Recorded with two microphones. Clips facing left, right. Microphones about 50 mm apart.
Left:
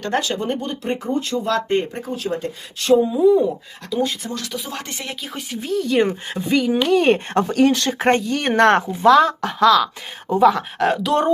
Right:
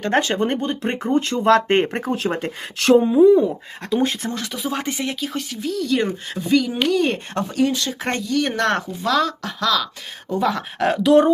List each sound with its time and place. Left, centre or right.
0.1 s speech: right
3.0 s speech: right
4.5 s speech: centre
5.5 s speech: left
6.0 s speech: centre; by 7.5 s left
7.7 s speech: left
7.9 s speech: left
10.4 s speech: centre